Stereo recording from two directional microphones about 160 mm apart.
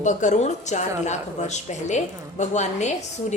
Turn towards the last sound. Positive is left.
turn(degrees=45)  # may be behind; listen again after turning